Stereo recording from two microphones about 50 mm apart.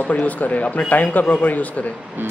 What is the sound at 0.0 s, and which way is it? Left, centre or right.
A man's voice, left.